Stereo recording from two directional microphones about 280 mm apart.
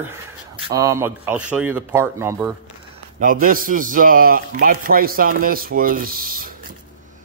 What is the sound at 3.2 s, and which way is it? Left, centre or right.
A man's voice, right.